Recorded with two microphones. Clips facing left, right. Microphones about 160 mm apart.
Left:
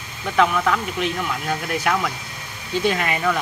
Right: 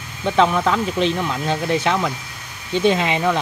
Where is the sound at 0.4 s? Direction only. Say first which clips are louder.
Right 2 dB; 30° right (ahead or behind).